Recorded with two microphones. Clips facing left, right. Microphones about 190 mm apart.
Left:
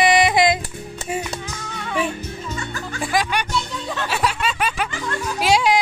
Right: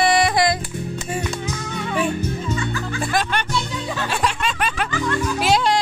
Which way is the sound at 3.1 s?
10° left (ahead or behind).